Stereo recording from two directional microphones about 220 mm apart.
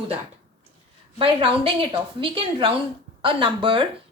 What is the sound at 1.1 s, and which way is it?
Speech, 25° right (ahead or behind).